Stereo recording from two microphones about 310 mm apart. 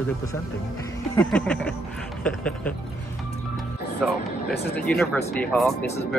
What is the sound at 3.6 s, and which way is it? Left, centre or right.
Music, centre.